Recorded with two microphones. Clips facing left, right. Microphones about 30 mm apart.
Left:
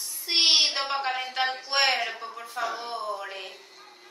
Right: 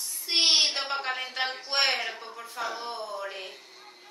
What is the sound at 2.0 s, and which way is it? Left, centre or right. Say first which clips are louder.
Speech: left 3 dB; centre.